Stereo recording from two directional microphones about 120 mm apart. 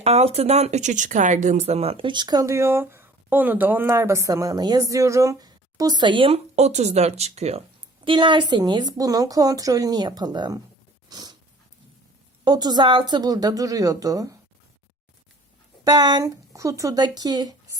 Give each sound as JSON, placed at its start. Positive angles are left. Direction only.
{"t": 0.0, "sound": "speech", "side_deg": -60}
{"t": 8.0, "sound": "speech", "side_deg": -45}
{"t": 11.1, "sound": "dog", "side_deg": -35}
{"t": 12.5, "sound": "speech", "side_deg": -35}
{"t": 15.8, "sound": "speech", "side_deg": -35}